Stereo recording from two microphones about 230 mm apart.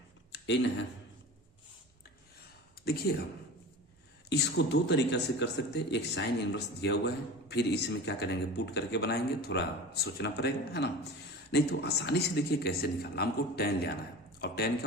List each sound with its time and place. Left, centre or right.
0.3 s speech: left
2.8 s a man's voice: left
4.3 s a man's voice: left